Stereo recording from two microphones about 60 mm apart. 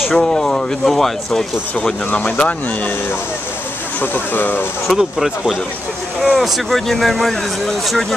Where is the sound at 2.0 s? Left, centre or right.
Left.